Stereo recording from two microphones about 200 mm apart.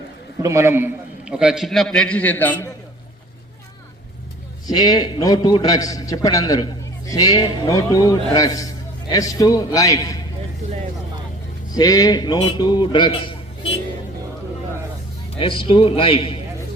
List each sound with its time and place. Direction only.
0.4 s a man's voice: 15° right (ahead or behind); by 2.6 s 10° left (ahead or behind)
4.6 s a man's voice: 20° left (ahead or behind)
11.7 s a man's voice: 20° left (ahead or behind)
15.4 s a man's voice: 25° left (ahead or behind)